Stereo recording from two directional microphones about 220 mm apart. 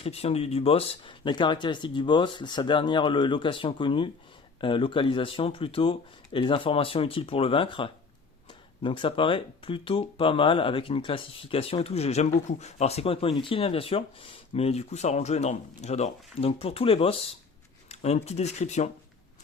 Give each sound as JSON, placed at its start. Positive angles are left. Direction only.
{"t": 0.0, "sound": "speech", "side_deg": 25}